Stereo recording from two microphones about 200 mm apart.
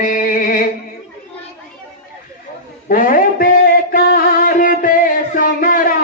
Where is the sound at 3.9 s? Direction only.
45° left (ahead or behind).